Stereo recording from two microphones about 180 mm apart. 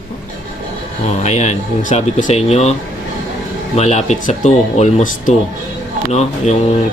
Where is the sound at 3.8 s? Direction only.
35° left (ahead or behind).